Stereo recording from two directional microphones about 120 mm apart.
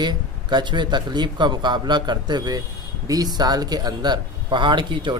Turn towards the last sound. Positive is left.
turn(degrees=-40)  # may be behind; listen again after turning